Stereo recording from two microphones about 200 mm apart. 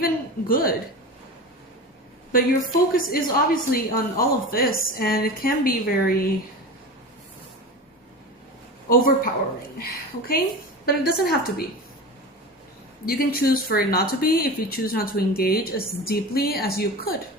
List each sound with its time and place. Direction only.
0.0 s a woman's voice: 45° left (ahead or behind)
2.9 s speech: 45° left (ahead or behind)
8.9 s speech: 45° left (ahead or behind)
13.1 s speech: 50° left (ahead or behind)